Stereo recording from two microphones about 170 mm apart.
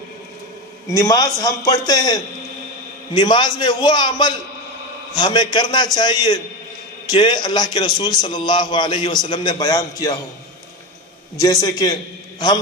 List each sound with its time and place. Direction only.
0.8 s a man's voice: 20° left (ahead or behind)
11.4 s a man's voice: 20° left (ahead or behind)